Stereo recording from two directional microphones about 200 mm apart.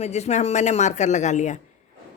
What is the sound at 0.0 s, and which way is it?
A woman's voice, 35° left (ahead or behind).